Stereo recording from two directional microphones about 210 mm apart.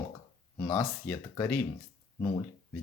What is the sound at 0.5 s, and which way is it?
Speech, 15° left (ahead or behind).